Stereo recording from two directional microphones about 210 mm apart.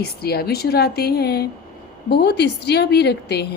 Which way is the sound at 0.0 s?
50° left (ahead or behind).